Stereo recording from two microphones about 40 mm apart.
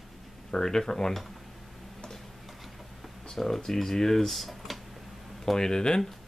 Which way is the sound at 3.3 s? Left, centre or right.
Centre.